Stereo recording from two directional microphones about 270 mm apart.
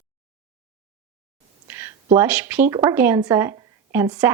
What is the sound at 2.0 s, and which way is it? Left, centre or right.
Speech, centre.